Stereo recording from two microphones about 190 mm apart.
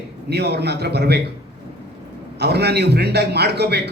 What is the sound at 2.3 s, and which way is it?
Speech, 60° right (ahead or behind).